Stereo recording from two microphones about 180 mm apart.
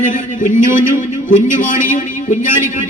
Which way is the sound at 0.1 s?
45° left (ahead or behind).